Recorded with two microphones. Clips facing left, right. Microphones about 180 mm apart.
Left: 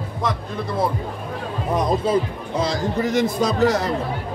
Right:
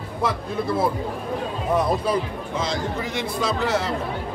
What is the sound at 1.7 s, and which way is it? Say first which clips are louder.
Speech: left 2 dB; 25° left (ahead or behind).